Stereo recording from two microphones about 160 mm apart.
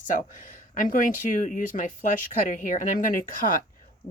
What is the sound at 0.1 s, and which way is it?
Speech, 55° left (ahead or behind).